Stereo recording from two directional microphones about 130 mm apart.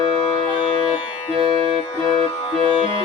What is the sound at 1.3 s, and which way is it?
Music, 40° right (ahead or behind).